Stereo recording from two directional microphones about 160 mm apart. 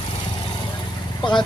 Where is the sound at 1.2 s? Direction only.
30° left (ahead or behind).